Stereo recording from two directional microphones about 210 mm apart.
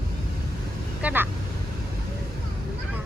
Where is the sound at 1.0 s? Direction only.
5° right (ahead or behind).